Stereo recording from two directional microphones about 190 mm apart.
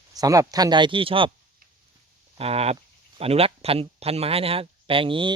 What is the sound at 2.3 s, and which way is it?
Speech, 30° right (ahead or behind).